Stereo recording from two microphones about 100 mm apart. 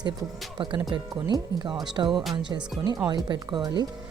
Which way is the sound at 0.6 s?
55° right (ahead or behind).